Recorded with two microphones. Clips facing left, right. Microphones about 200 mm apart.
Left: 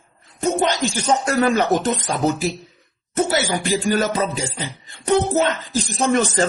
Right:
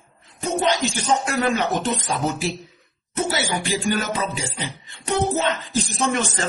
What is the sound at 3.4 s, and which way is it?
Speech, 45° left (ahead or behind).